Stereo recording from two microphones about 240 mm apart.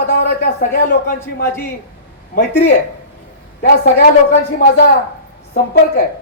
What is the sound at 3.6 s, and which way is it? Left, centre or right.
Speech, left.